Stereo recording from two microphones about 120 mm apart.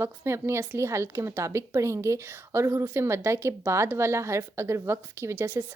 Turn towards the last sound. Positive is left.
turn(degrees=-20)  # may be behind; listen again after turning